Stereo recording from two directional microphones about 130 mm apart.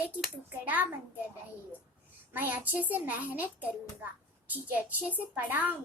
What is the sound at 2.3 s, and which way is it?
A woman's voice, 15° right (ahead or behind).